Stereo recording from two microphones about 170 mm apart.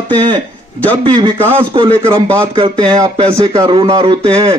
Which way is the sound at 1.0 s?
30° right (ahead or behind).